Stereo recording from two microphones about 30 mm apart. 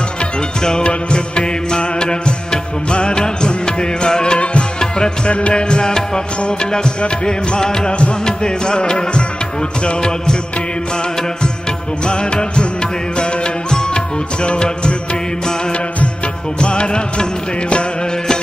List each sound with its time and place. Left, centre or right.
0.6 s music: left
7.2 s music of bollywood: left
8.3 s music: left
9.8 s music of bollywood: left
12.0 s music: left
16.5 s music: left